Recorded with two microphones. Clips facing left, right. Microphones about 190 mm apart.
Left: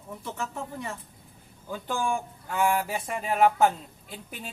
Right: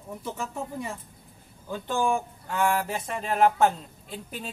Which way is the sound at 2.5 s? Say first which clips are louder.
Even; 10° left (ahead or behind).